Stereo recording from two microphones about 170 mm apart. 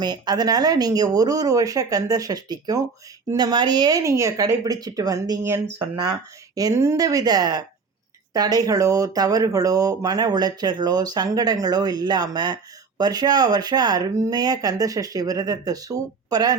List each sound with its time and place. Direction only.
0.0 s speech: 25° right (ahead or behind)